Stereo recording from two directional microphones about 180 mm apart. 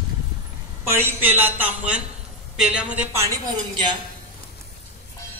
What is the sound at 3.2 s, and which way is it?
Speech, 20° right (ahead or behind).